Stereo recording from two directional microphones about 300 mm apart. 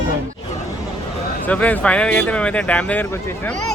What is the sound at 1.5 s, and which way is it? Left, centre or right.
Speech, centre.